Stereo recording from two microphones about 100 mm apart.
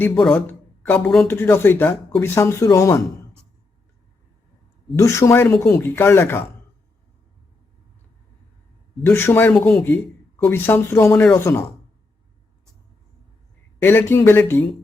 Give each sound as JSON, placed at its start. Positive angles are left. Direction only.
{"t": 0.1, "sound": "speech", "side_deg": 5}
{"t": 0.3, "sound": "speech", "side_deg": 20}
{"t": 1.0, "sound": "speech", "side_deg": 5}
{"t": 1.3, "sound": "speech", "side_deg": 25}
{"t": 4.9, "sound": "speech", "side_deg": 30}
{"t": 9.0, "sound": "speech", "side_deg": 20}
{"t": 13.8, "sound": "speech", "side_deg": 20}